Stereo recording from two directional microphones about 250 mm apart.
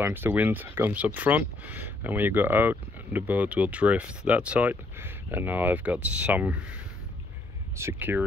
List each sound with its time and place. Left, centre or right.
0.0 s speech: centre
7.7 s speech: centre